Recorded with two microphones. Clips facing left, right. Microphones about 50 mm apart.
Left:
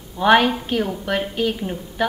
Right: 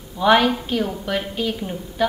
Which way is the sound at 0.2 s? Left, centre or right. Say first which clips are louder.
Left 1 dB; left.